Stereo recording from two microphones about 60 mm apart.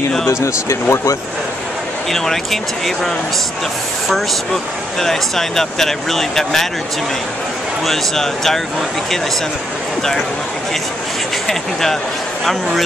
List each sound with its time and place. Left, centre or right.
0.3 s speech: left
2.0 s speech: centre
5.0 s speech: centre
7.8 s speech: centre
11.4 s speech: centre